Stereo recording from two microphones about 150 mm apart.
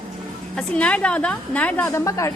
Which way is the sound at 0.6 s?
10° left (ahead or behind).